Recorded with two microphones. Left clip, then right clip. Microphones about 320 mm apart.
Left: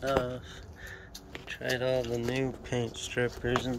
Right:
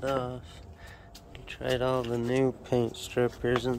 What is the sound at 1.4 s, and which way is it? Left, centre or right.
Speech, centre.